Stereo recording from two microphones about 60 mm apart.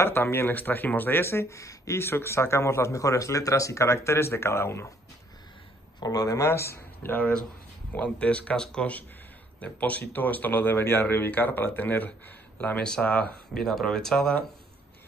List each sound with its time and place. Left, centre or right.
0.0 s speech: left
6.0 s speech: left
6.4 s speech: left
7.9 s speech: left
13.6 s speech: centre